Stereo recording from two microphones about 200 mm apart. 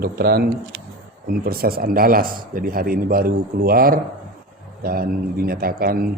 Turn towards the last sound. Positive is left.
turn(degrees=-50)  # may be behind; listen again after turning